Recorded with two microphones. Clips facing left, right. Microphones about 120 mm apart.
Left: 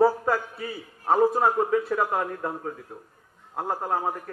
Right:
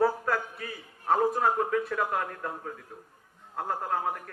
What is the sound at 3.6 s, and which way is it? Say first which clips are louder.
Speech: left 3 dB; 25° left (ahead or behind).